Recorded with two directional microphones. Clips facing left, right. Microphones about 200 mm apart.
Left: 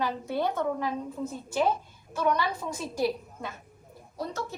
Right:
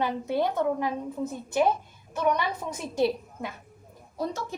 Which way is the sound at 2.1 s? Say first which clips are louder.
Right 1 dB; 20° right (ahead or behind).